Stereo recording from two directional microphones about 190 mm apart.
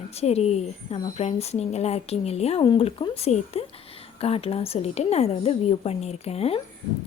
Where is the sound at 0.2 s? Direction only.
35° left (ahead or behind).